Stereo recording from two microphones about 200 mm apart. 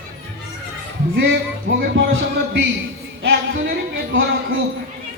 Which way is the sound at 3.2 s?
50° right (ahead or behind).